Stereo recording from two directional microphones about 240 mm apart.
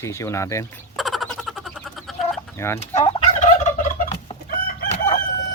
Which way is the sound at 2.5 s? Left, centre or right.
Centre.